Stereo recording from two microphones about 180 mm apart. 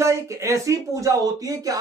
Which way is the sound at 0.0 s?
15° right (ahead or behind).